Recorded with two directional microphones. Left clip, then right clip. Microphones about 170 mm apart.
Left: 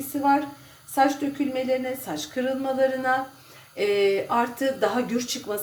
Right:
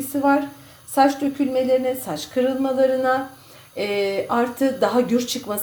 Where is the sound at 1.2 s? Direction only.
30° right (ahead or behind).